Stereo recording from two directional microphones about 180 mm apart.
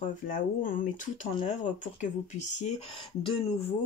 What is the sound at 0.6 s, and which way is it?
Speech, 50° left (ahead or behind).